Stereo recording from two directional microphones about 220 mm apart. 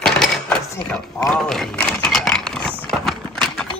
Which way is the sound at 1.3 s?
Centre (ahead or behind).